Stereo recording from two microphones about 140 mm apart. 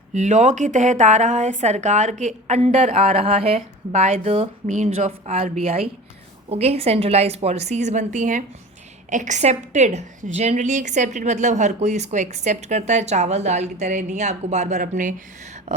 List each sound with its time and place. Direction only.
0.1 s a woman's voice: 55° right (ahead or behind)
4.6 s a woman's voice: 60° right (ahead or behind)